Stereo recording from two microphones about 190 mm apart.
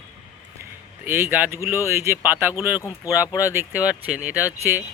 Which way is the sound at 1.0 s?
10° right (ahead or behind).